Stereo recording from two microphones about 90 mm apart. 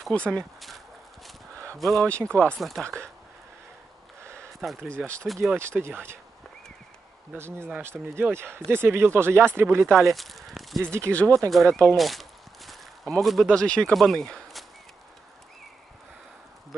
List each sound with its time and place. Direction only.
0.0 s speech: 10° left (ahead or behind)
1.8 s speech: centre (ahead or behind)
2.2 s speech: 10° left (ahead or behind)
4.2 s a sound: 30° right (ahead or behind)
4.6 s speech: centre (ahead or behind)
5.6 s speech: 30° right (ahead or behind)
7.3 s speech: 25° right (ahead or behind)
9.8 s speech: centre (ahead or behind)
10.8 s speech: 30° right (ahead or behind)
11.1 s speech: 15° left (ahead or behind)
12.0 s walk: centre (ahead or behind)
13.9 s speech: 5° left (ahead or behind)